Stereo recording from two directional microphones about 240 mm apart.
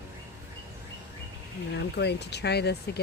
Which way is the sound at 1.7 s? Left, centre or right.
Left.